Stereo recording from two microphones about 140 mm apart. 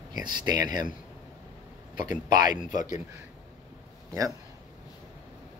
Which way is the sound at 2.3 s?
70° left (ahead or behind).